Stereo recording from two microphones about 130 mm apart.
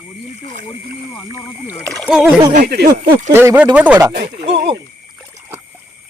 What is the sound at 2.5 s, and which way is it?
Speech, 90° right.